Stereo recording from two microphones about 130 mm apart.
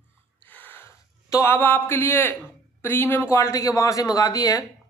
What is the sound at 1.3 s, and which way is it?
Speech, 20° left (ahead or behind).